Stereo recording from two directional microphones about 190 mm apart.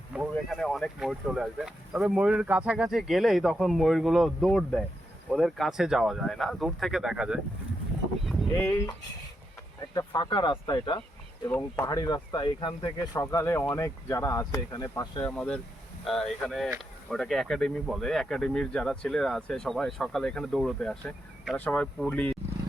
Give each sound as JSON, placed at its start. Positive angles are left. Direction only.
{"t": 0.1, "sound": "speech", "side_deg": 0}
{"t": 9.9, "sound": "speech", "side_deg": 20}
{"t": 11.4, "sound": "speech", "side_deg": 10}
{"t": 11.9, "sound": "speech", "side_deg": 20}
{"t": 15.2, "sound": "speech", "side_deg": 5}